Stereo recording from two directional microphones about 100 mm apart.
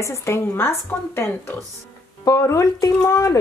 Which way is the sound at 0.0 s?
30° left (ahead or behind).